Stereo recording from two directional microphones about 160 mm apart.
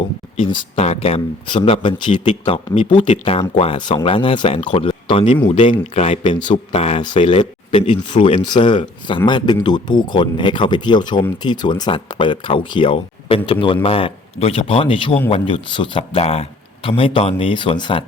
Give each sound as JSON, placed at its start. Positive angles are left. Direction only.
{"t": 0.8, "sound": "a man's voice", "side_deg": 40}